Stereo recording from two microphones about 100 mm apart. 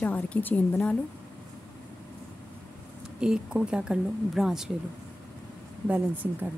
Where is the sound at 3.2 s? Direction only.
10° right (ahead or behind).